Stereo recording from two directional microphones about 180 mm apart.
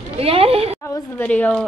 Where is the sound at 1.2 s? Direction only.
10° left (ahead or behind).